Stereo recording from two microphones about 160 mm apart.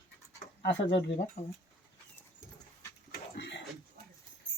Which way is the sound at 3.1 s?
90° left.